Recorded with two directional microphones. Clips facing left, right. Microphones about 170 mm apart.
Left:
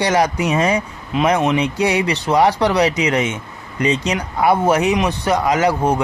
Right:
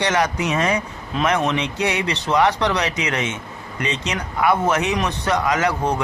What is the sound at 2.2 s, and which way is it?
Speech, 30° left (ahead or behind).